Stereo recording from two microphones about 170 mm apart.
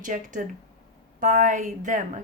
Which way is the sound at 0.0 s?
50° right (ahead or behind).